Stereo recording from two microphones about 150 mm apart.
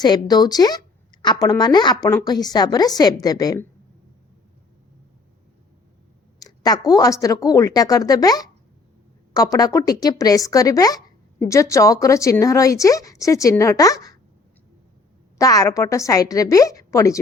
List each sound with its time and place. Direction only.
0.0 s a woman's voice: 25° left (ahead or behind)
6.4 s a woman's voice: 25° left (ahead or behind)
15.4 s a woman's voice: 20° left (ahead or behind)